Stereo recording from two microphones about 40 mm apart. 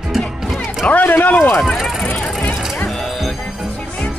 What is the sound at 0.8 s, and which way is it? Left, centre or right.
Speech, left.